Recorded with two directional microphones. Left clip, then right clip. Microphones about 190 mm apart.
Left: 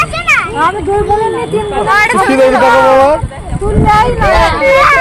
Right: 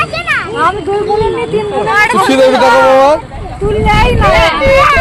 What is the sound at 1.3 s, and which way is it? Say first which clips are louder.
Speech: even; 35° left (ahead or behind).